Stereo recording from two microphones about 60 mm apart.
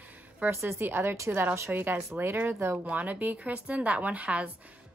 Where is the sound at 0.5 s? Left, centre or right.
Right.